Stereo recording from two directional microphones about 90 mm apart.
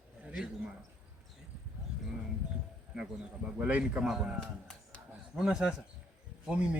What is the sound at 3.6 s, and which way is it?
A man's voice, 15° right (ahead or behind).